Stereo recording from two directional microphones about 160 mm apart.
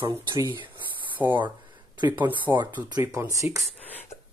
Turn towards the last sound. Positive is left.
turn(degrees=-20)  # may be behind; listen again after turning